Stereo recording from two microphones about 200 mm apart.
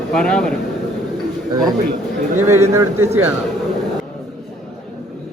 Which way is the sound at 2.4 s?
10° right (ahead or behind).